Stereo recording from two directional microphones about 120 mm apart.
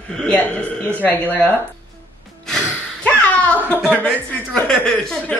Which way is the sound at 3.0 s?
10° left (ahead or behind).